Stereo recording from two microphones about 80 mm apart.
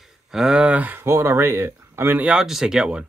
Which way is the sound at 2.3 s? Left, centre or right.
Centre.